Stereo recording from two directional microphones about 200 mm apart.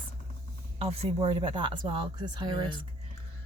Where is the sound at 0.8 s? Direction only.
25° right (ahead or behind).